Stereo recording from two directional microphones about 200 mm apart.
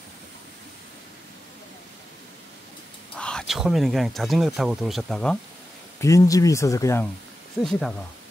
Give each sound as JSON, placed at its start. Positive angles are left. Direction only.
{"t": 3.2, "sound": "speech", "side_deg": 5}
{"t": 5.9, "sound": "speech", "side_deg": 15}
{"t": 7.6, "sound": "speech", "side_deg": 0}